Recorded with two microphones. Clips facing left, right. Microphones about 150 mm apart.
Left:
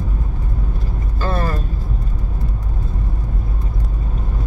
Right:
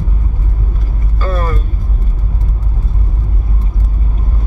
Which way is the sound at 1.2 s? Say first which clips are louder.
Right 2 dB; 30° left (ahead or behind).